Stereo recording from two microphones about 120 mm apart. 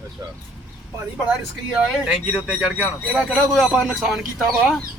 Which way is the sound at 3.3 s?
5° left (ahead or behind).